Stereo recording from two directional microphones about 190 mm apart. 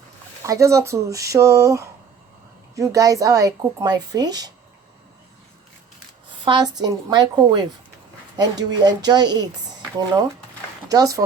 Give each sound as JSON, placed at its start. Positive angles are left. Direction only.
{"t": 0.4, "sound": "a woman's voice", "side_deg": -15}
{"t": 6.4, "sound": "a woman's voice", "side_deg": -25}
{"t": 10.8, "sound": "a woman's voice", "side_deg": -20}